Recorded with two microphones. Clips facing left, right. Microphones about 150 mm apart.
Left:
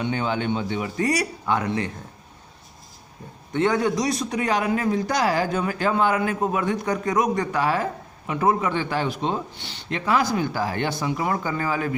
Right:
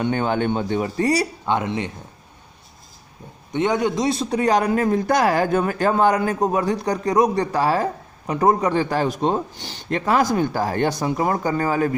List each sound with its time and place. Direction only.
0.0 s a man's voice: 50° right (ahead or behind); by 1.9 s 20° right (ahead or behind)
3.5 s a man's voice: 20° right (ahead or behind); by 11.9 s 40° right (ahead or behind)